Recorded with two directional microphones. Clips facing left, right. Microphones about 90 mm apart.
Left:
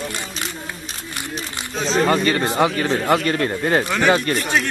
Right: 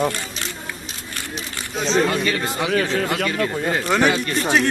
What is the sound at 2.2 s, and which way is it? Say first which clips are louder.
Speech: left 4 dB; 45° left (ahead or behind).